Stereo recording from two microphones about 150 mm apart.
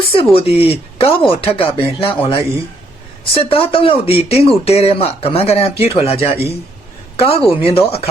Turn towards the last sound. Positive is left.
turn(degrees=40)  # may be behind; listen again after turning